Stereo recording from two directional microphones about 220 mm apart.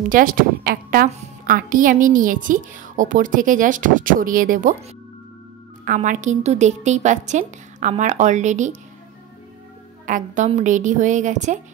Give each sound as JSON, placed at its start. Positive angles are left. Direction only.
{"t": 0.0, "sound": "a woman's voice", "side_deg": -40}
{"t": 5.9, "sound": "a woman's voice", "side_deg": -35}
{"t": 10.0, "sound": "a woman's voice", "side_deg": -35}